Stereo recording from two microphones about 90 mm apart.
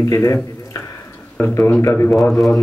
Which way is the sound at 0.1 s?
35° left (ahead or behind).